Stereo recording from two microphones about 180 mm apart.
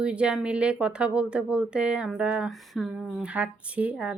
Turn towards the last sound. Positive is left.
turn(degrees=-5)  # may be behind; listen again after turning